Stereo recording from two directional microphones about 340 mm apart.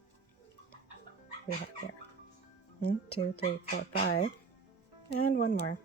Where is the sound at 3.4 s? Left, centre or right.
Left.